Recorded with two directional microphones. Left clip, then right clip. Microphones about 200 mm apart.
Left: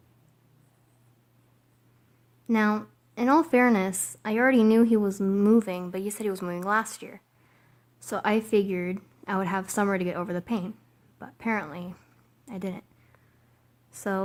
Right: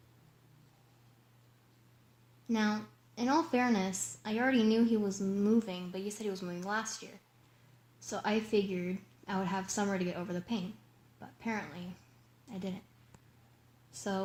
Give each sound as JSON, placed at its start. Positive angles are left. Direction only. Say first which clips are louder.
{"t": 2.5, "sound": "a woman's voice", "louder": "left 9 dB", "side_deg": 50}
{"t": 14.0, "sound": "a woman's voice", "louder": "left 7 dB", "side_deg": 45}